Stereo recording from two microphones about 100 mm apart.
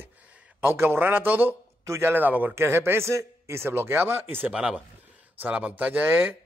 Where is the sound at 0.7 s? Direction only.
20° right (ahead or behind).